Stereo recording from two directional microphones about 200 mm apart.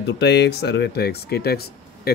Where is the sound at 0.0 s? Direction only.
60° left (ahead or behind).